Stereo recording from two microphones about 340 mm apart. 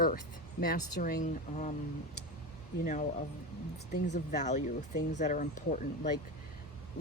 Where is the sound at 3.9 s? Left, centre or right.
Left.